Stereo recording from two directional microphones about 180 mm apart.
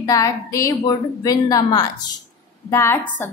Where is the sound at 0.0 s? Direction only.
20° left (ahead or behind).